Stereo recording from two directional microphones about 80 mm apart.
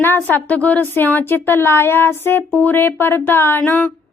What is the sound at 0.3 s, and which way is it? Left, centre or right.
A woman's voice, left.